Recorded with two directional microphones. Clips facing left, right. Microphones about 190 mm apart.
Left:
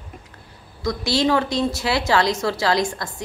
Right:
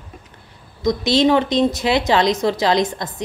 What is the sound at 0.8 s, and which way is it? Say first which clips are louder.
A woman's voice: right 5 dB; 20° right (ahead or behind).